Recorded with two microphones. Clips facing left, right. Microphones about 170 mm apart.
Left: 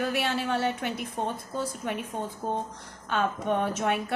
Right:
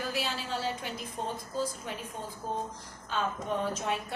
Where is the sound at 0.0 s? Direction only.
60° left (ahead or behind).